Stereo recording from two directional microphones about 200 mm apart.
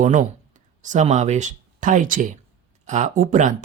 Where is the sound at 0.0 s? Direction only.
40° right (ahead or behind).